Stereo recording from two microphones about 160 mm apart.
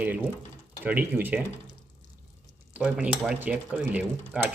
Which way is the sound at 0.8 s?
10° right (ahead or behind).